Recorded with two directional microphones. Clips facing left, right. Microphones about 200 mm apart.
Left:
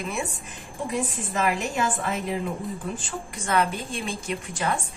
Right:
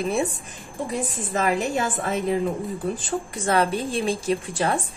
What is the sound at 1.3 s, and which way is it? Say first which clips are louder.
Speech: right 3 dB; 40° right (ahead or behind).